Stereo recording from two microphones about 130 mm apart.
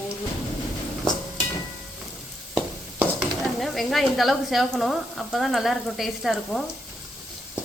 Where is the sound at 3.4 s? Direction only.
Centre (ahead or behind).